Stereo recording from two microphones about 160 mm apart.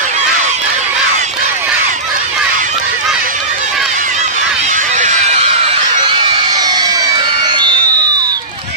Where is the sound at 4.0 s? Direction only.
50° right (ahead or behind); by 8.3 s 25° right (ahead or behind).